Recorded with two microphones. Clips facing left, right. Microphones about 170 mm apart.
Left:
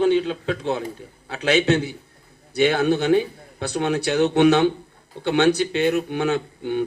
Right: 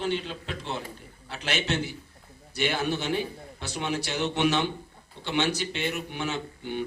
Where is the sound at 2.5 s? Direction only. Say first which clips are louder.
Left 9 dB; 65° left (ahead or behind).